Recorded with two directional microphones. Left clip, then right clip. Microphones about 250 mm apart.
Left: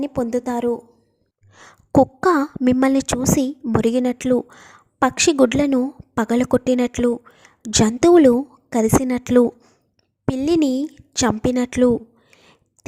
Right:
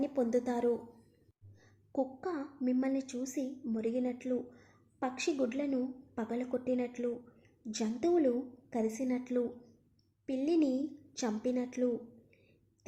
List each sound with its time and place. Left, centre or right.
0.0 s a woman's voice: left